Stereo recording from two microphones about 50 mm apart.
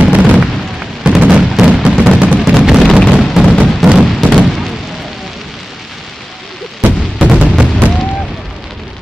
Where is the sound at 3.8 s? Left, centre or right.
Centre.